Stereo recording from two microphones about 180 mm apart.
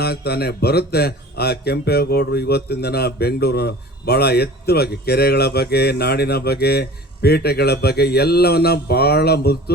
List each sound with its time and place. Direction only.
0.0 s speech: 60° left (ahead or behind)